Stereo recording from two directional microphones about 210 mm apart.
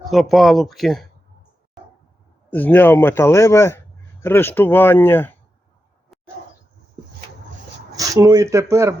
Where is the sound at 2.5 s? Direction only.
10° left (ahead or behind).